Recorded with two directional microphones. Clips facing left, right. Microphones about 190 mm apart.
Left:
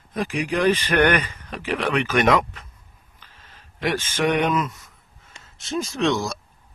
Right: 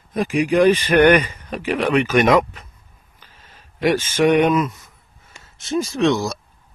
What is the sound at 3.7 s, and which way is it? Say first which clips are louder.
A man's voice: right 7 dB; 10° right (ahead or behind).